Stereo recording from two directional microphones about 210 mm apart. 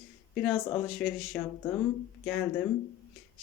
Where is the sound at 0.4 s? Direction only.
Centre (ahead or behind).